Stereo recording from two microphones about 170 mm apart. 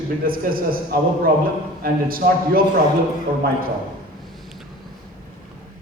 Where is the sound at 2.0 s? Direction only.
60° right (ahead or behind).